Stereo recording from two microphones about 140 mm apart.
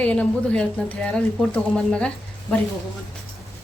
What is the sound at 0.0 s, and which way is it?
Speech, 10° left (ahead or behind).